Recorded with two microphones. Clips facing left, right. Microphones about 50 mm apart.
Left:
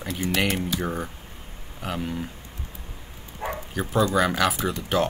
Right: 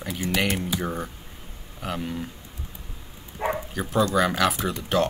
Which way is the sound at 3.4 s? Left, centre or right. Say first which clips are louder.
Right 4 dB; right.